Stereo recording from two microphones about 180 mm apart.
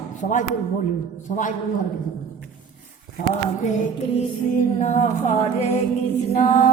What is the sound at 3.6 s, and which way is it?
Music, 40° left (ahead or behind).